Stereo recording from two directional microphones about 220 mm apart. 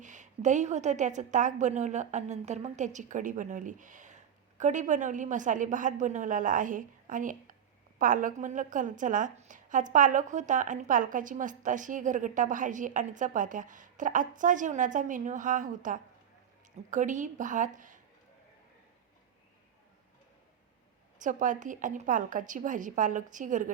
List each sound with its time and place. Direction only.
0.0 s a woman's voice: 35° right (ahead or behind)
21.2 s a woman's voice: 35° right (ahead or behind)